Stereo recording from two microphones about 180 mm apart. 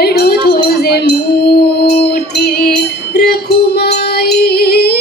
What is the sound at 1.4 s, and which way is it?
Music, 60° left (ahead or behind).